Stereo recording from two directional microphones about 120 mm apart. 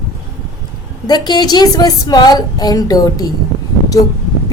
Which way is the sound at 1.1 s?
35° left (ahead or behind).